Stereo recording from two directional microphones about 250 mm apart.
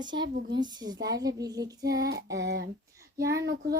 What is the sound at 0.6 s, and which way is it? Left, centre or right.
Child singing, centre.